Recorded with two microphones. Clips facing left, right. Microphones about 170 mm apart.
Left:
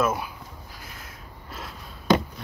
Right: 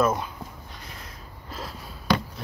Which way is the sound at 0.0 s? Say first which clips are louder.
Right 2 dB; 10° left (ahead or behind).